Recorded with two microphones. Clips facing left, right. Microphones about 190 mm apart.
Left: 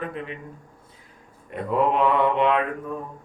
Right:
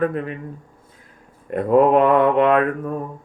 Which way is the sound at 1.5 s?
50° right (ahead or behind).